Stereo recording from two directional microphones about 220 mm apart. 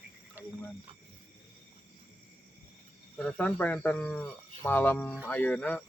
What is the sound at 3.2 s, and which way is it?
Speech, 5° left (ahead or behind).